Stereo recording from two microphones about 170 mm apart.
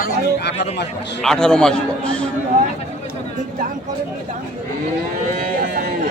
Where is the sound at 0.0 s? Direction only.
75° left (ahead or behind).